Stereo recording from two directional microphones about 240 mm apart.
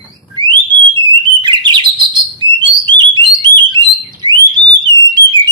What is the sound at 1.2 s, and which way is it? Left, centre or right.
Bird, centre.